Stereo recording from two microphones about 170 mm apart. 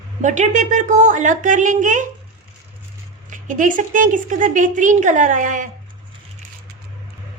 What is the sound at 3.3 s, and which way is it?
A woman's voice, 50° right (ahead or behind).